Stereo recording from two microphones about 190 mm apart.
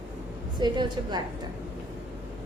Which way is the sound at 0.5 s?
25° right (ahead or behind).